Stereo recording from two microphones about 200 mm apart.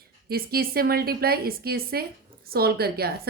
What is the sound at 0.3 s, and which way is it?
A woman's voice, 50° right (ahead or behind).